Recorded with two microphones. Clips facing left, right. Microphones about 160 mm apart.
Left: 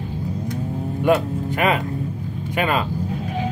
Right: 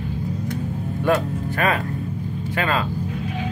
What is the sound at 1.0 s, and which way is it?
Speech, 15° left (ahead or behind).